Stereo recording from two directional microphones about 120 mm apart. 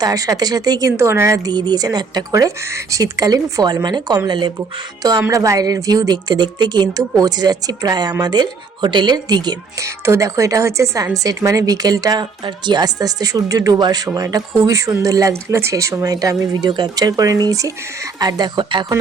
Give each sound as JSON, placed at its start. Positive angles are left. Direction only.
{"t": 0.0, "sound": "speech", "side_deg": -30}
{"t": 1.5, "sound": "speech", "side_deg": -35}
{"t": 5.3, "sound": "speech", "side_deg": -30}